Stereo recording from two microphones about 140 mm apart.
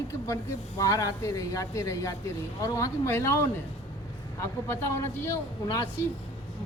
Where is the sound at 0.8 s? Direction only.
25° left (ahead or behind).